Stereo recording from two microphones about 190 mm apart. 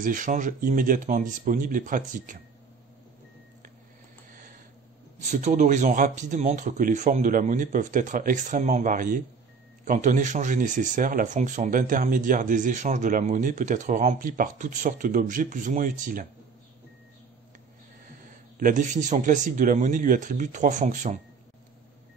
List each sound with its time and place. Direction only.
0.0 s speech: 45° right (ahead or behind)
5.2 s speech: 40° right (ahead or behind)
18.6 s speech: 40° right (ahead or behind)